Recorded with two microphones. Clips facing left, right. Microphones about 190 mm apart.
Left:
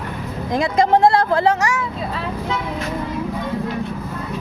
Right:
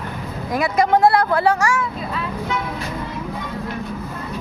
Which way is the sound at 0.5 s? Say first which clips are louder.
Left 1 dB; 25° left (ahead or behind).